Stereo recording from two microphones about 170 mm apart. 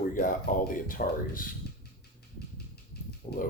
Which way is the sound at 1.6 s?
70° left (ahead or behind).